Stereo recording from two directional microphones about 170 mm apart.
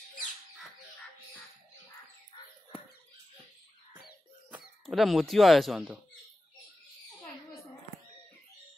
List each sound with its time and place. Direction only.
4.8 s speech: centre (ahead or behind)